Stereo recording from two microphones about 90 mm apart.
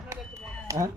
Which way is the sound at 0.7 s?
35° right (ahead or behind).